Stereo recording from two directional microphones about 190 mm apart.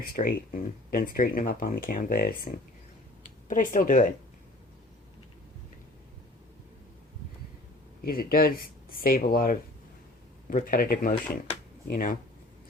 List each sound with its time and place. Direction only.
0.0 s speech: 45° left (ahead or behind)
8.0 s speech: 50° left (ahead or behind)